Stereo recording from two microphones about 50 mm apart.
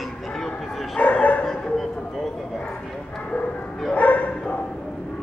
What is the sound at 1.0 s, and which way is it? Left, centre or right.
Speech, left.